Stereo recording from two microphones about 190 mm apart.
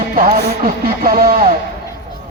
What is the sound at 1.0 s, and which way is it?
Speech, 50° right (ahead or behind).